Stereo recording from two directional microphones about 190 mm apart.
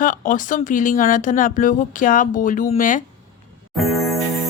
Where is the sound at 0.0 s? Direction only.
45° left (ahead or behind).